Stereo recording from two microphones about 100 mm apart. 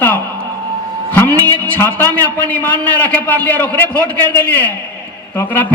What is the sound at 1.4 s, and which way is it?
A man's voice, 20° left (ahead or behind).